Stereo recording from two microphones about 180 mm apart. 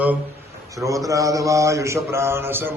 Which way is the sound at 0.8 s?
20° right (ahead or behind).